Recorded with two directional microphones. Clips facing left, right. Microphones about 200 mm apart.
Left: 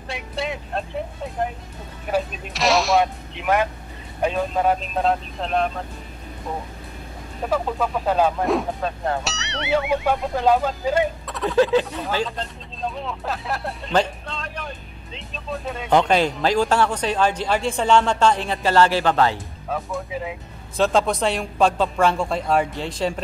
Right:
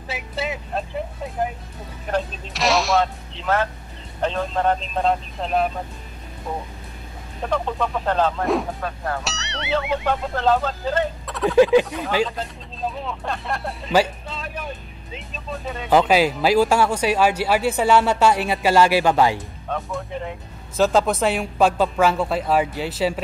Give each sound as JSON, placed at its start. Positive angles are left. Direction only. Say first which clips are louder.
{"t": 0.1, "sound": "speech", "louder": "even", "side_deg": 0}
{"t": 2.0, "sound": "speech", "louder": "left 1 dB", "side_deg": 10}
{"t": 2.5, "sound": "speech", "louder": "left 1 dB", "side_deg": 0}
{"t": 3.0, "sound": "speech", "louder": "left 1 dB", "side_deg": 15}
{"t": 7.4, "sound": "speech", "louder": "left 1 dB", "side_deg": 5}
{"t": 8.8, "sound": "speech", "louder": "left 3 dB", "side_deg": 25}
{"t": 9.2, "sound": "speech", "louder": "left 2 dB", "side_deg": 0}
{"t": 11.2, "sound": "a sound", "louder": "right 3 dB", "side_deg": 0}
{"t": 11.5, "sound": "speech", "louder": "right 3 dB", "side_deg": -15}
{"t": 12.3, "sound": "speech", "louder": "right 1 dB", "side_deg": 0}
{"t": 19.7, "sound": "speech", "louder": "even", "side_deg": 5}